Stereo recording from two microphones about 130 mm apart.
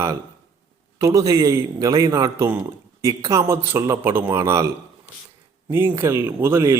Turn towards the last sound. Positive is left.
turn(degrees=-20)  # may be behind; listen again after turning